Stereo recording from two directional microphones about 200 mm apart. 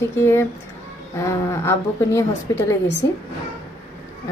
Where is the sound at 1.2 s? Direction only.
15° left (ahead or behind).